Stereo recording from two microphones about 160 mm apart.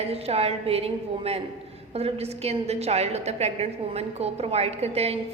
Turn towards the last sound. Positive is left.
turn(degrees=-40)  # may be behind; listen again after turning